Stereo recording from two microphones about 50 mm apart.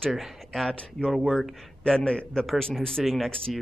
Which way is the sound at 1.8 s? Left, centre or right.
Centre.